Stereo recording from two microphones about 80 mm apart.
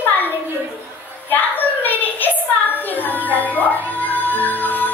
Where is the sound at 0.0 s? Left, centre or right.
Left.